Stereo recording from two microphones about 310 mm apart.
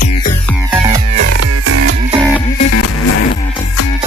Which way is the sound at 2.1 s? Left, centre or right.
Centre.